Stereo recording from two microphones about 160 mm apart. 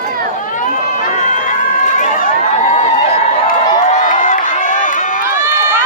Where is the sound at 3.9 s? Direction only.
55° left (ahead or behind).